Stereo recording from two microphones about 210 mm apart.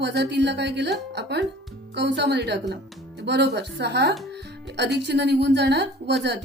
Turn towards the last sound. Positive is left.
turn(degrees=-55)  # may be behind; listen again after turning